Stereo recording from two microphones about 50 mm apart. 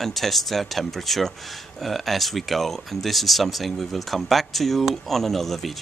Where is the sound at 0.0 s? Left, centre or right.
Centre.